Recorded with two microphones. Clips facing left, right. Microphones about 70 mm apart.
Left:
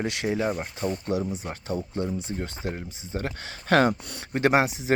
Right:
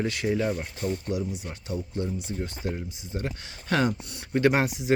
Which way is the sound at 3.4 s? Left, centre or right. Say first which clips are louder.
Left 5 dB; left.